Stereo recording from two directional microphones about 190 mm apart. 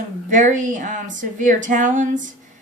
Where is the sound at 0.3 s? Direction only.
40° right (ahead or behind).